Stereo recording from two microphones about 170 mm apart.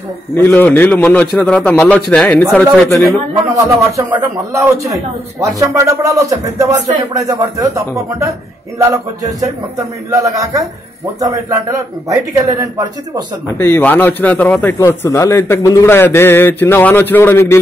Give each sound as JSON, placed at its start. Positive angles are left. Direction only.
{"t": 0.4, "sound": "a man's voice", "side_deg": 10}
{"t": 3.4, "sound": "a man's voice", "side_deg": -20}
{"t": 13.6, "sound": "a man's voice", "side_deg": 15}